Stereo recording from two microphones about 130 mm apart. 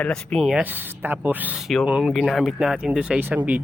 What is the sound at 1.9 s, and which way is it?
Speech, 10° right (ahead or behind).